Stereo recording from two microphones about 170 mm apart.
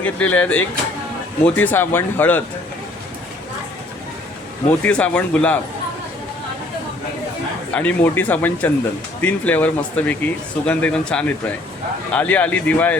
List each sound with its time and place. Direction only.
0.0 s speech: 10° left (ahead or behind)
4.8 s speech: 5° left (ahead or behind)
7.7 s speech: 10° left (ahead or behind)